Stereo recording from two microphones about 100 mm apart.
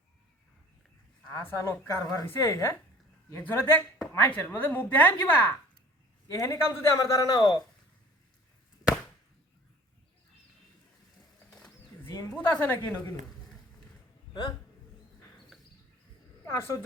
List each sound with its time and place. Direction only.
1.3 s a woman's voice: 25° left (ahead or behind)
6.2 s a man's voice: 30° left (ahead or behind)
12.5 s a woman's voice: 20° left (ahead or behind)
16.5 s a woman's voice: 25° left (ahead or behind)